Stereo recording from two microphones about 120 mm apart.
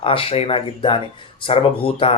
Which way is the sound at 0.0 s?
50° left (ahead or behind).